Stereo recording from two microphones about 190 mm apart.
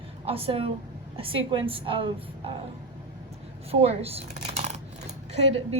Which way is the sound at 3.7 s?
30° right (ahead or behind).